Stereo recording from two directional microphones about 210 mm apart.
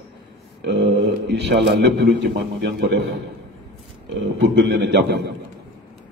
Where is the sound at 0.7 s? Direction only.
55° right (ahead or behind).